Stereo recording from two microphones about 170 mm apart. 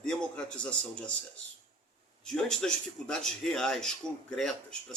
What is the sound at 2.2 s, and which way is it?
Speech, 5° left (ahead or behind).